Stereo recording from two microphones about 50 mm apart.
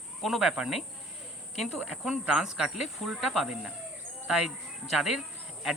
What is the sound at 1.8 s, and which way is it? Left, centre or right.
Speech, centre.